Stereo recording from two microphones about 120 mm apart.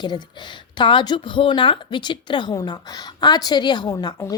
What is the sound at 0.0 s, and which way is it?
Speech, 40° left (ahead or behind).